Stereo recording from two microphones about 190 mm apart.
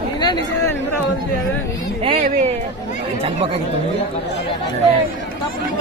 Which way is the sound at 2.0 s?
35° right (ahead or behind).